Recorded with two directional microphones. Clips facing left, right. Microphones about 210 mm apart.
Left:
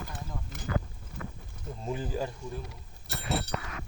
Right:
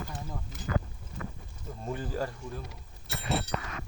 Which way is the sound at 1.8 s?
20° left (ahead or behind).